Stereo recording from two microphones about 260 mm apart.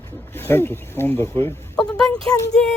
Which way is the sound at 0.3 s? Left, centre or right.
Centre.